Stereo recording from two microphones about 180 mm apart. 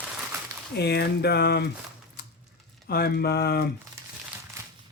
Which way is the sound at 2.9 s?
60° left (ahead or behind).